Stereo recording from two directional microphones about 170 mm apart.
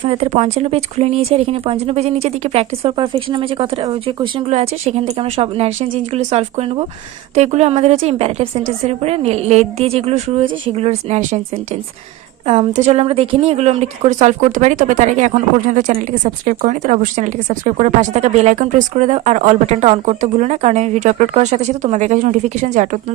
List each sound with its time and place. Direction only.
0.0 s speech: 35° right (ahead or behind)